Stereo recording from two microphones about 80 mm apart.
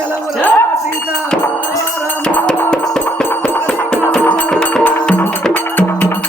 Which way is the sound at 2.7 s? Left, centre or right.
Centre.